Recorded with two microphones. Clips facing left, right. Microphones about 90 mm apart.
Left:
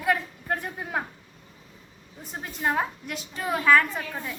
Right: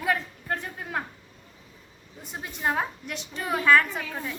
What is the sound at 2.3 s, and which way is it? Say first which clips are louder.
A woman's voice: left 1 dB; centre (ahead or behind).